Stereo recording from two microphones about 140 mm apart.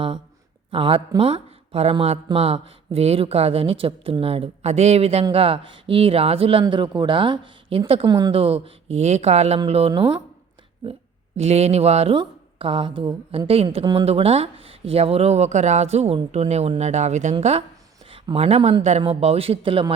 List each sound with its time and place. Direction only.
0.7 s speech: 40° right (ahead or behind)
8.0 s speech: 30° right (ahead or behind)
8.3 s speech: 45° right (ahead or behind)
11.3 s speech: 50° right (ahead or behind)
12.1 s a woman's voice: 35° right (ahead or behind)